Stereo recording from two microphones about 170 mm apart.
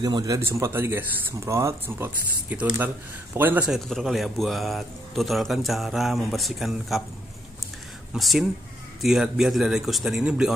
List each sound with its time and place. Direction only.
0.0 s speech: 20° right (ahead or behind)
3.3 s a man's voice: 10° right (ahead or behind)
8.1 s a man's voice: centre (ahead or behind)